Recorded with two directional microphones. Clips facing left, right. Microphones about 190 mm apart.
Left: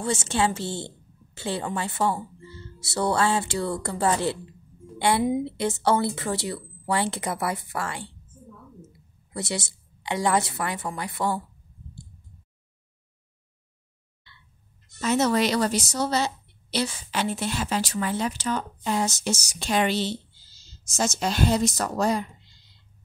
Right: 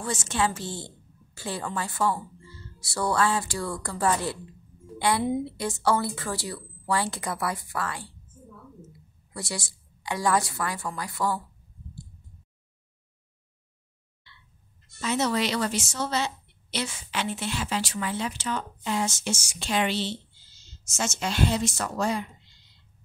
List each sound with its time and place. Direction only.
0.0 s a woman's voice: 25° left (ahead or behind)
4.9 s a sound: 25° left (ahead or behind)
5.4 s speech: 25° left (ahead or behind)
9.3 s speech: 25° left (ahead or behind)
15.0 s a woman's voice: 45° left (ahead or behind)